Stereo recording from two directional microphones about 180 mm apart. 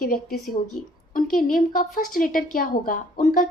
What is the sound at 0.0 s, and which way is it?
A woman's voice, 50° left (ahead or behind).